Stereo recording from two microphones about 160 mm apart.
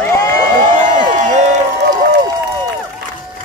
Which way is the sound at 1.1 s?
50° right (ahead or behind).